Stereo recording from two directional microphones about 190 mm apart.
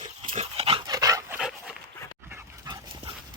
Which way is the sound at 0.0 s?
40° right (ahead or behind).